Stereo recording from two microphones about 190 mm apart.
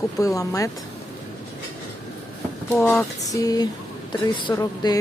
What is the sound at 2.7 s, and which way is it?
Speech, 10° left (ahead or behind).